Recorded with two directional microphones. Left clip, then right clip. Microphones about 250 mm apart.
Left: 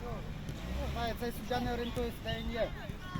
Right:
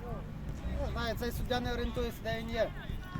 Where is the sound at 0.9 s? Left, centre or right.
Right.